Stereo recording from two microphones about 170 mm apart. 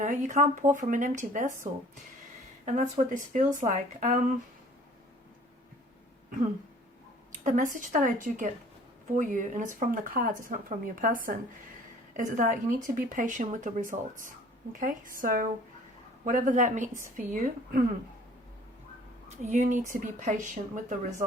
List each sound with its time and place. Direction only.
0.0 s speech: 50° right (ahead or behind)
2.6 s speech: 45° right (ahead or behind)
7.4 s speech: 50° right (ahead or behind)
19.4 s speech: 45° right (ahead or behind)